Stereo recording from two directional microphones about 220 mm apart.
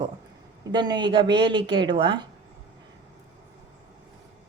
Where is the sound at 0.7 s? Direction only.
20° right (ahead or behind).